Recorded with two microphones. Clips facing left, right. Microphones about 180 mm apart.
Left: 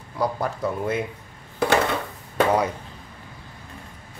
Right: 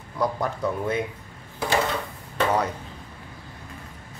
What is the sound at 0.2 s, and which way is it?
Speech, 5° left (ahead or behind).